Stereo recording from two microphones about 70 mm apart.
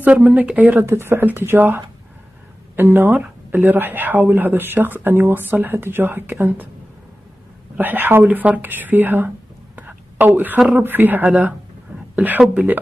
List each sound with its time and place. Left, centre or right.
0.0 s speech: right
0.8 s speech: right
7.7 s speech: right
9.8 s whispering: right
10.8 s speech: right